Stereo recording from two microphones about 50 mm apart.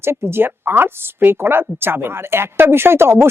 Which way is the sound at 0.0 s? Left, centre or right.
Right.